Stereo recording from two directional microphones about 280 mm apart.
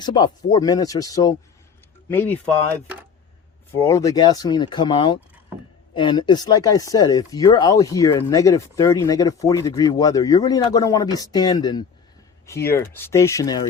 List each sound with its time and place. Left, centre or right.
0.0 s speech: centre
3.8 s speech: centre